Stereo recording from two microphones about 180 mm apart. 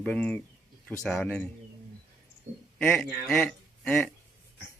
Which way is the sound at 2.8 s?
5° left (ahead or behind).